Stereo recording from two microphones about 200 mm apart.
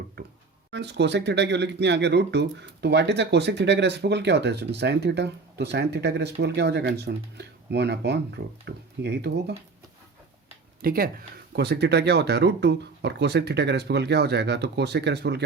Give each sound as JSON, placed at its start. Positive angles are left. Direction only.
{"t": 0.2, "sound": "a sound", "side_deg": -55}
{"t": 0.7, "sound": "speech", "side_deg": -60}
{"t": 10.8, "sound": "speech", "side_deg": -45}